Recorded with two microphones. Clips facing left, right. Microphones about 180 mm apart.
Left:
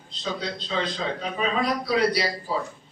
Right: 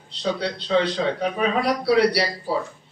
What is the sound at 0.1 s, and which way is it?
A man's voice, 70° right (ahead or behind).